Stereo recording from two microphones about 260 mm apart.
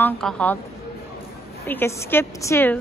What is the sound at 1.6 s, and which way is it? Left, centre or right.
A woman's voice, centre.